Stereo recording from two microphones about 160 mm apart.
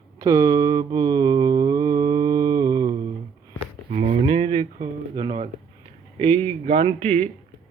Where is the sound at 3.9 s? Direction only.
35° right (ahead or behind).